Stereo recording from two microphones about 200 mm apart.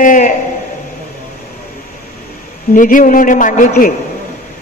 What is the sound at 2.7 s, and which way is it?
A man's voice, 40° left (ahead or behind).